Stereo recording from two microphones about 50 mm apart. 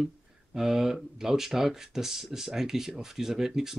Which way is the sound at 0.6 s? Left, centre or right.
Centre.